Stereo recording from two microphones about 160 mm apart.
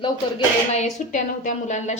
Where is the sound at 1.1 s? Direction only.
50° left (ahead or behind).